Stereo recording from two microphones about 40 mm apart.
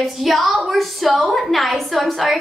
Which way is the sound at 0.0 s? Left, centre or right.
Centre.